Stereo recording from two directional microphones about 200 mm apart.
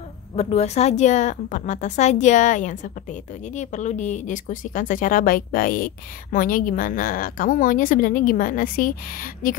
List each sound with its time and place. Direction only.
0.4 s speech: 30° left (ahead or behind)